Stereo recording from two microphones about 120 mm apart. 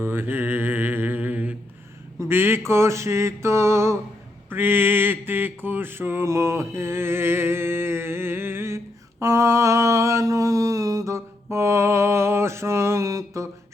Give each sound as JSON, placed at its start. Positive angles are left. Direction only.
{"t": 0.0, "sound": "mantra", "side_deg": -15}